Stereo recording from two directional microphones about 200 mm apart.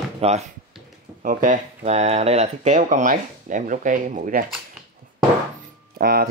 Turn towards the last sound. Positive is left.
turn(degrees=-50)  # may be behind; listen again after turning